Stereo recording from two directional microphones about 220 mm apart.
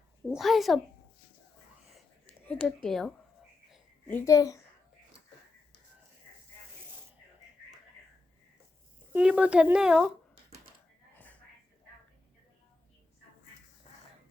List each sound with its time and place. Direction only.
0.3 s a woman's voice: centre (ahead or behind)
2.5 s a woman's voice: 5° left (ahead or behind)
4.3 s a woman's voice: 15° left (ahead or behind)
9.1 s a woman's voice: 5° right (ahead or behind)
11.1 s whispering: 5° left (ahead or behind)
13.9 s a sound: 30° left (ahead or behind)